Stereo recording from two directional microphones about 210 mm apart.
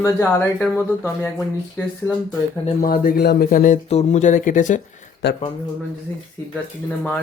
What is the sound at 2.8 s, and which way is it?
Speech, 45° left (ahead or behind).